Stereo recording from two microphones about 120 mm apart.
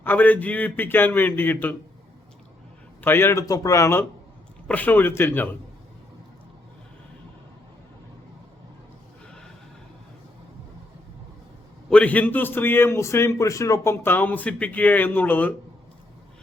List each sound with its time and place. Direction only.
0.0 s a man's voice: 15° left (ahead or behind)
3.0 s a man's voice: 20° left (ahead or behind)
4.7 s a man's voice: 15° left (ahead or behind)
11.9 s a man's voice: 10° left (ahead or behind)